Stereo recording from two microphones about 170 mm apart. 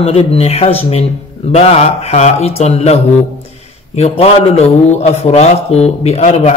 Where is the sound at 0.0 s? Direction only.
35° left (ahead or behind).